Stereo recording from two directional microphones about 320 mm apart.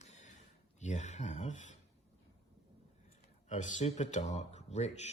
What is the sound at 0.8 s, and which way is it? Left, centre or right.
Speech, left.